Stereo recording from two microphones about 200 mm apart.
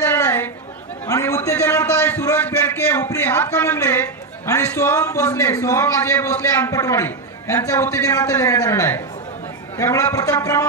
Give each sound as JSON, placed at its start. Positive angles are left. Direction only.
{"t": 0.0, "sound": "chatter", "side_deg": 10}
{"t": 1.0, "sound": "a man's voice", "side_deg": 15}